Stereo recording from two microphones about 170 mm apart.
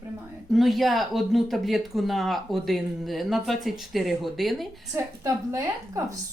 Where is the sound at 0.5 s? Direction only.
Centre (ahead or behind).